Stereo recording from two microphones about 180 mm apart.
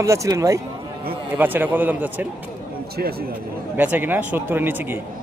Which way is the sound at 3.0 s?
60° right (ahead or behind).